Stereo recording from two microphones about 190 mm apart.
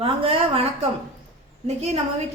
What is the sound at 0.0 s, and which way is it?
A woman's voice, 30° right (ahead or behind).